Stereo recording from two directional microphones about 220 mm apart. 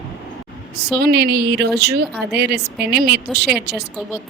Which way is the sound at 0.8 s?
45° right (ahead or behind).